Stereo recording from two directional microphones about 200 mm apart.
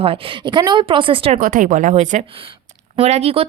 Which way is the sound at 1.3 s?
40° right (ahead or behind).